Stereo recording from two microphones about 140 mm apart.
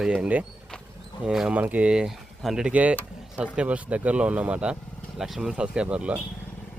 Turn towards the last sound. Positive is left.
turn(degrees=-5)  # may be behind; listen again after turning